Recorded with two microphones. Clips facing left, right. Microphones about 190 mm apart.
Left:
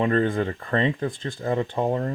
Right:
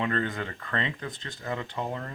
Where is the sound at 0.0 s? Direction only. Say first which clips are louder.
Left 8 dB; 40° left (ahead or behind).